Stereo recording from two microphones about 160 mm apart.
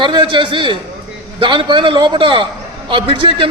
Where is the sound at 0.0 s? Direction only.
30° right (ahead or behind).